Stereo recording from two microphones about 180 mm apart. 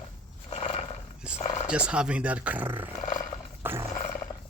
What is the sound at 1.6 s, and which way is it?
Speech, 5° right (ahead or behind).